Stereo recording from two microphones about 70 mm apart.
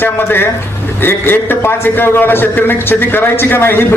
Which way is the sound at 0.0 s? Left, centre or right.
Left.